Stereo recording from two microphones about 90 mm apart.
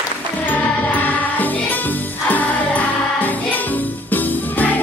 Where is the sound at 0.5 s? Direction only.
15° left (ahead or behind).